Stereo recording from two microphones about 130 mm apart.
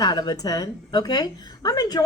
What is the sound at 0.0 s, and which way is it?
A woman's voice, 30° left (ahead or behind).